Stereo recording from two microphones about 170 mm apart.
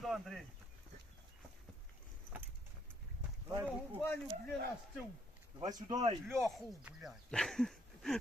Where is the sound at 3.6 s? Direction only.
10° right (ahead or behind).